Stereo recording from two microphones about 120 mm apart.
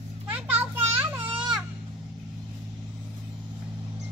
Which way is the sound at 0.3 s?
15° right (ahead or behind).